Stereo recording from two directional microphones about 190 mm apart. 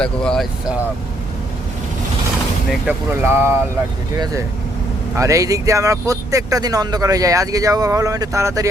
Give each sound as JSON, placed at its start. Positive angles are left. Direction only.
{"t": 0.0, "sound": "speech", "side_deg": 5}
{"t": 2.8, "sound": "speech", "side_deg": -10}
{"t": 5.1, "sound": "speech", "side_deg": -15}